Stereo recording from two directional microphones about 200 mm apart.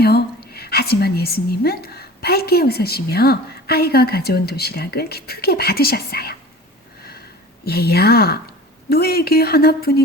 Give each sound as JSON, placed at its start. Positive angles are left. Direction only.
{"t": 0.0, "sound": "a woman's voice", "side_deg": 50}
{"t": 7.6, "sound": "a woman's voice", "side_deg": 50}